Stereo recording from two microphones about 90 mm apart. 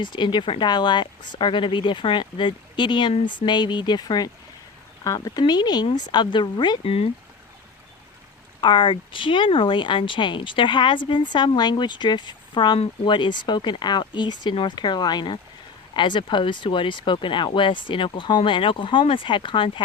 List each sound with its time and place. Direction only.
0.0 s speech: 60° left (ahead or behind)
5.0 s speech: 40° left (ahead or behind); by 7.0 s 75° left (ahead or behind)
8.6 s speech: 60° left (ahead or behind)